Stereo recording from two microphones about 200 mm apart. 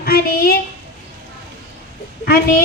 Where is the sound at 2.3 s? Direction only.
50° left (ahead or behind).